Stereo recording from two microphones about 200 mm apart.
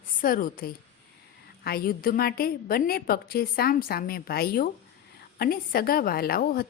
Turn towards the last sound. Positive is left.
turn(degrees=50)  # may be behind; listen again after turning